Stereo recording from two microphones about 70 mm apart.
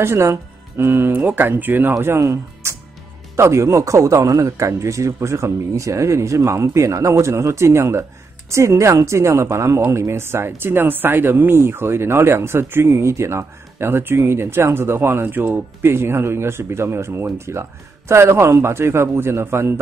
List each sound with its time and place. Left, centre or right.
0.0 s a man's voice: right